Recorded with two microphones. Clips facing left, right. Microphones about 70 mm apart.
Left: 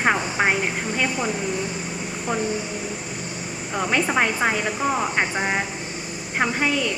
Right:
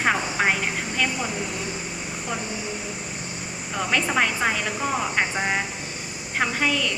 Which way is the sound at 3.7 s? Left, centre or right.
Centre.